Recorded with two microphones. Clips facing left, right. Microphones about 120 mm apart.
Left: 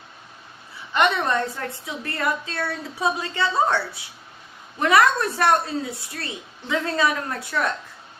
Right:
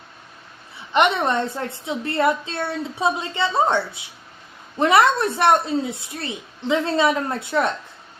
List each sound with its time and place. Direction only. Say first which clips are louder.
0.9 s a woman's voice: right 2 dB; 25° right (ahead or behind)